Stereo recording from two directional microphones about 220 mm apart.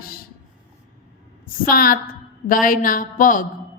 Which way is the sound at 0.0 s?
40° left (ahead or behind).